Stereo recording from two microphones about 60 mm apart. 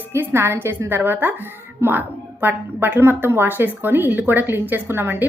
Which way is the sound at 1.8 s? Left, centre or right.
Right.